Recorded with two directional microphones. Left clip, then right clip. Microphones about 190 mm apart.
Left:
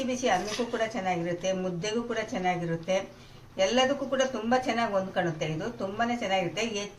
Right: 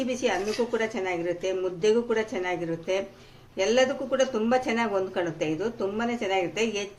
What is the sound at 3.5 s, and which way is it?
Speech, 50° right (ahead or behind).